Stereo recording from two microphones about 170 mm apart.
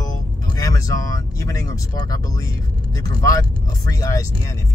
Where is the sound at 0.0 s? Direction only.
20° left (ahead or behind).